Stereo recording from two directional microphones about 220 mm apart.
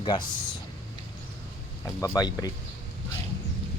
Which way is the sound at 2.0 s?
15° left (ahead or behind).